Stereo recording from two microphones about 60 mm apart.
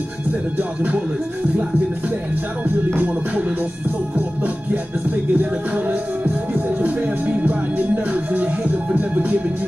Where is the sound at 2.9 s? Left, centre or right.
Right.